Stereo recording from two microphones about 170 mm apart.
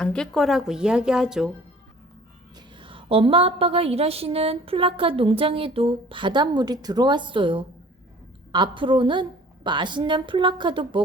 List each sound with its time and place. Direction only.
0.0 s speech: 5° left (ahead or behind)
2.6 s a woman's voice: 30° right (ahead or behind)